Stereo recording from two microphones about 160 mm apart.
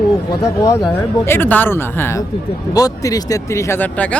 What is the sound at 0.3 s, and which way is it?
Speech, 20° left (ahead or behind).